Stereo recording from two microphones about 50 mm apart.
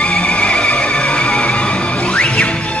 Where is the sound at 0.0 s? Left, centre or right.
Left.